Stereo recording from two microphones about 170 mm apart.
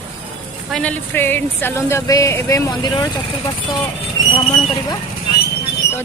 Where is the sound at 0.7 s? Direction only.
5° left (ahead or behind).